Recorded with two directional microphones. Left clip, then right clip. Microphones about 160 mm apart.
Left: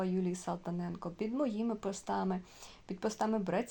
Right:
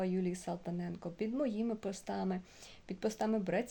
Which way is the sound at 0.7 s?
45° left (ahead or behind).